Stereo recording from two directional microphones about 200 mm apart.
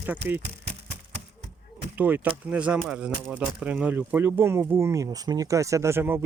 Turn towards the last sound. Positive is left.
turn(degrees=-10)  # may be behind; listen again after turning